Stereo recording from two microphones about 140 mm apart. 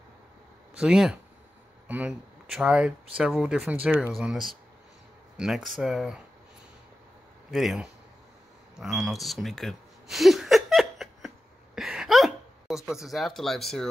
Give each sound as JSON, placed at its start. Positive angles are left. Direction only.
{"t": 0.7, "sound": "speech", "side_deg": -5}
{"t": 5.8, "sound": "speech", "side_deg": -5}
{"t": 7.5, "sound": "speech", "side_deg": -5}
{"t": 8.7, "sound": "a sound", "side_deg": -5}